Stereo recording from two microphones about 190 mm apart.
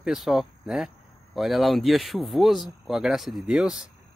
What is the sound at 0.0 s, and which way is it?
Speech, centre (ahead or behind).